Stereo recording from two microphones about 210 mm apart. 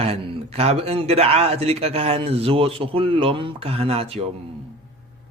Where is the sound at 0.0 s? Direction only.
30° right (ahead or behind).